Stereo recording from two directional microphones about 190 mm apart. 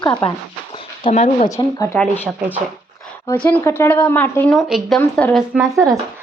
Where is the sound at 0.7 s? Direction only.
30° left (ahead or behind).